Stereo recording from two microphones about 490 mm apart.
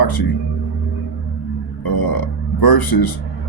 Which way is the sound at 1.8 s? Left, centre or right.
Left.